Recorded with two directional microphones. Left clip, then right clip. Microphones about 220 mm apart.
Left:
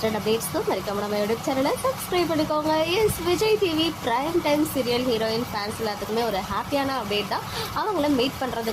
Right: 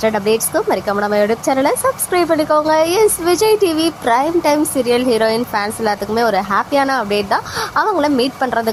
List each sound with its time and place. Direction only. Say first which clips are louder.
0.0 s speech: right 9 dB; 25° right (ahead or behind)